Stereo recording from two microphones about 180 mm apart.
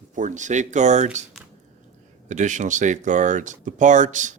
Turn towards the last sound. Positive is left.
turn(degrees=-45)  # may be behind; listen again after turning